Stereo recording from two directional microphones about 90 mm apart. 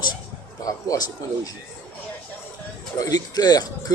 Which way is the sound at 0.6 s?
45° left (ahead or behind).